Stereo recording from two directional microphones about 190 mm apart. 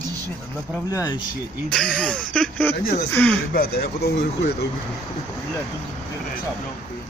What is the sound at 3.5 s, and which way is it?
Speech, 55° left (ahead or behind).